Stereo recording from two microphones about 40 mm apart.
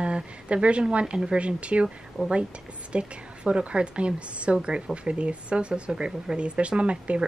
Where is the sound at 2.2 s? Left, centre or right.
Centre.